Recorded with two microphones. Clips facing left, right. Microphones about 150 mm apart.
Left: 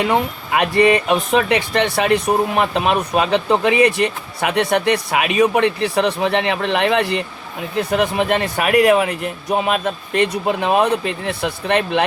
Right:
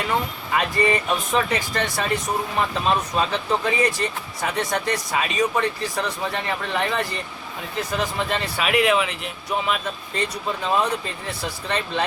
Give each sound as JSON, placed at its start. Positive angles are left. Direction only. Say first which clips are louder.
{"t": 0.0, "sound": "speech", "louder": "left 6 dB", "side_deg": 65}
{"t": 9.5, "sound": "speech", "louder": "left 6 dB", "side_deg": 60}